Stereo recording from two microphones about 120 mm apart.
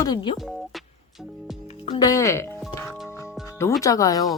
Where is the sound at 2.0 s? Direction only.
30° left (ahead or behind).